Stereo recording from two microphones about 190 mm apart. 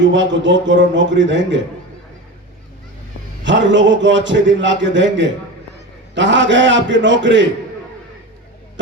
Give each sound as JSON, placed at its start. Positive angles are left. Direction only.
{"t": 0.0, "sound": "a man's voice", "side_deg": -75}
{"t": 3.4, "sound": "a man's voice", "side_deg": -75}